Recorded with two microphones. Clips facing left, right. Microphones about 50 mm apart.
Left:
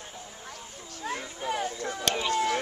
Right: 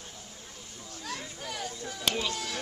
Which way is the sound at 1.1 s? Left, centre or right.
Left.